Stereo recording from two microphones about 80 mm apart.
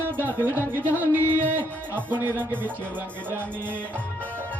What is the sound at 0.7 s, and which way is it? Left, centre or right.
Music, right.